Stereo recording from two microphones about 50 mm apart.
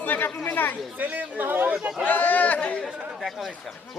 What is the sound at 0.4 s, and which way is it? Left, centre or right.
Speech, left.